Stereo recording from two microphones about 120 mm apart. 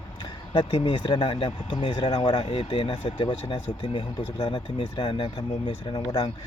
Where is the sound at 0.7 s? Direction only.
50° left (ahead or behind).